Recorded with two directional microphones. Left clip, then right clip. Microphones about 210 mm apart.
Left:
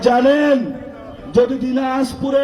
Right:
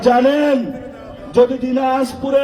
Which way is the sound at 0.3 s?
55° right (ahead or behind).